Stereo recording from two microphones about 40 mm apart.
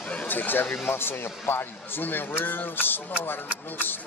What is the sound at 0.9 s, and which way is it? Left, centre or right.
Speech, left.